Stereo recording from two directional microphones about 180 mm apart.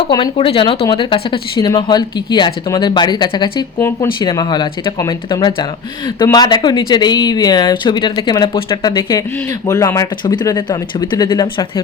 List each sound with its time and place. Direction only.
0.3 s speech: 30° left (ahead or behind)
3.8 s speech: 15° left (ahead or behind)